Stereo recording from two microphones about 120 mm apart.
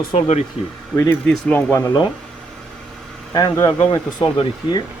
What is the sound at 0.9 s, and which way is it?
Speech, 10° left (ahead or behind).